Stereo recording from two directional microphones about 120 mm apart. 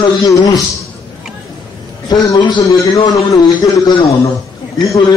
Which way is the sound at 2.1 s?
35° left (ahead or behind).